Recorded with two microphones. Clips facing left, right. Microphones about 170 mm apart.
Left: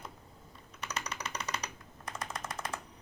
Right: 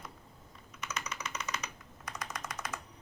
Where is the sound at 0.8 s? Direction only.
35° left (ahead or behind).